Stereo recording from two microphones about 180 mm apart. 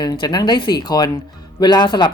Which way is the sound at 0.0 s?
25° left (ahead or behind).